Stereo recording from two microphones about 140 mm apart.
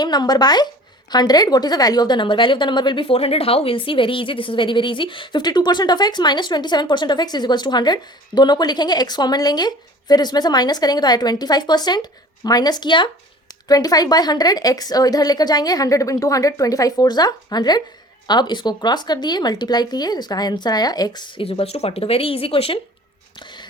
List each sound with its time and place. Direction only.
0.0 s a woman's voice: 30° left (ahead or behind)
21.4 s speech: 45° left (ahead or behind)